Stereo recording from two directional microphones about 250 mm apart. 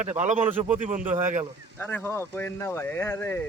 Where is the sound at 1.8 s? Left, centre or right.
Centre.